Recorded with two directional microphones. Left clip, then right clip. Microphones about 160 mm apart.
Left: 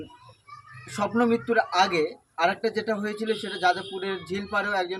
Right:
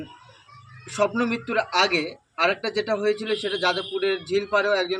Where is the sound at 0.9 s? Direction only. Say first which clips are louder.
Right 1 dB; 35° left (ahead or behind).